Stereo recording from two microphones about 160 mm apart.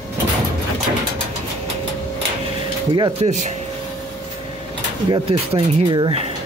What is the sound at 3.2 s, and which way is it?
Speech, 40° right (ahead or behind).